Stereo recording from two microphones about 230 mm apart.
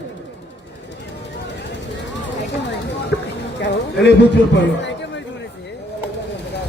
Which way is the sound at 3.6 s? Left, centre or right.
Left.